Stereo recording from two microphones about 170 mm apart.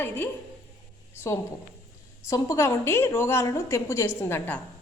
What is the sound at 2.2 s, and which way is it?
A woman's voice, 15° left (ahead or behind).